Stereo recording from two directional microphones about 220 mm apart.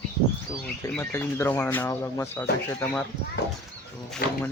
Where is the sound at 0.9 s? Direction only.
10° left (ahead or behind).